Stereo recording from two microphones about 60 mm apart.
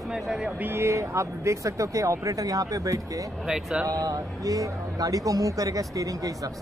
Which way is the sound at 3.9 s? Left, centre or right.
Right.